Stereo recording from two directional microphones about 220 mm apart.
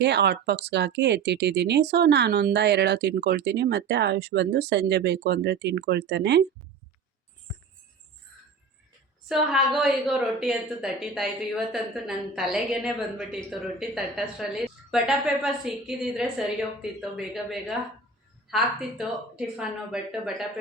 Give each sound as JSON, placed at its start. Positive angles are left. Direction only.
{"t": 0.0, "sound": "speech", "side_deg": -50}
{"t": 9.3, "sound": "a woman's voice", "side_deg": 0}